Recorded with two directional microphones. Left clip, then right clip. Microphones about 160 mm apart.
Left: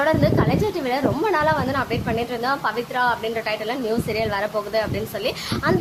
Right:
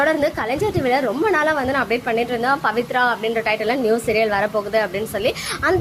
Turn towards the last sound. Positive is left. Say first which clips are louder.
# right 3 dB
turn(degrees=-20)  # may be behind; listen again after turning